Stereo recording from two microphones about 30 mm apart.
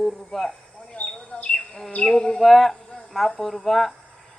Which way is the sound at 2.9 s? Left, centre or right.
Left.